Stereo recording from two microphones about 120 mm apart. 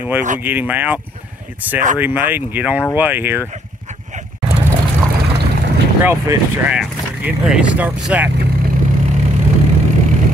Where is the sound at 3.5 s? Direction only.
80° right.